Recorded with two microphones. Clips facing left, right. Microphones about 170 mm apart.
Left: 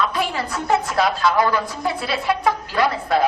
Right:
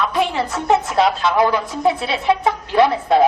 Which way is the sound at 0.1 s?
25° right (ahead or behind).